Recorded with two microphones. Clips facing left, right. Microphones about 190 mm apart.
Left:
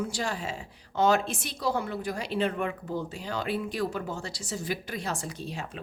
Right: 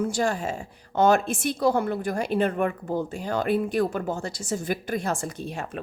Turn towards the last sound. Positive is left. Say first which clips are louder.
# right 4 dB
turn(degrees=-55)  # may be behind; listen again after turning